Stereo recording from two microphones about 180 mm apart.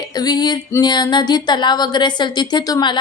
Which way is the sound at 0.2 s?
20° left (ahead or behind).